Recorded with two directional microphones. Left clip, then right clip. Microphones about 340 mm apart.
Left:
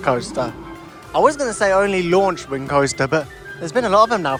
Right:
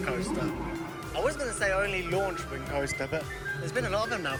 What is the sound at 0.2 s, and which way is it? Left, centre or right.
Speech, centre.